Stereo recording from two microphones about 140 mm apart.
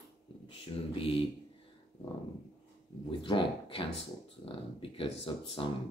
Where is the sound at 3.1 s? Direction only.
35° left (ahead or behind).